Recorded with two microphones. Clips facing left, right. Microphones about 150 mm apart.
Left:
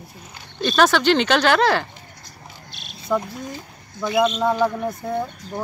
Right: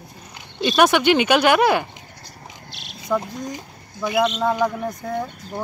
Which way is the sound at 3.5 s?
10° right (ahead or behind).